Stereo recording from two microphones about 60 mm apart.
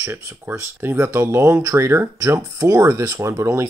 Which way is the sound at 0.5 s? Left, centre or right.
Right.